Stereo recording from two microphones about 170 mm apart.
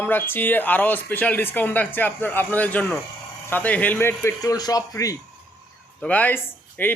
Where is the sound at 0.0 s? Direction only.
10° left (ahead or behind).